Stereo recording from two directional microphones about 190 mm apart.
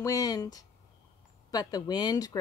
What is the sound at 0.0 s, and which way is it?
Speech, 20° left (ahead or behind).